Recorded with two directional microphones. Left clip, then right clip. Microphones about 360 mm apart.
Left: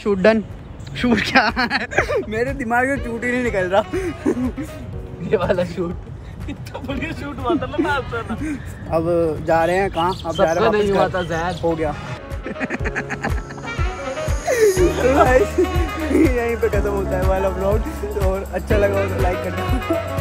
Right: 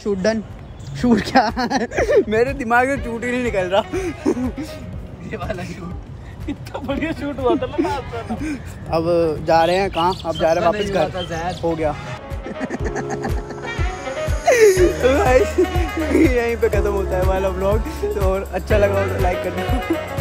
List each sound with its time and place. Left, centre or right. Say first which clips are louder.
0.0 s speech: left 4 dB; centre
2.6 s speech: right 2 dB; centre
5.3 s speech: left 10 dB; centre
6.9 s speech: right 4 dB; right
7.9 s speech: left 3 dB; centre
12.4 s music: left 1 dB; centre
14.8 s speech: left 1 dB; centre